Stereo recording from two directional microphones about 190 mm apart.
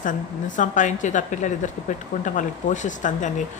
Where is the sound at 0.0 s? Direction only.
45° left (ahead or behind).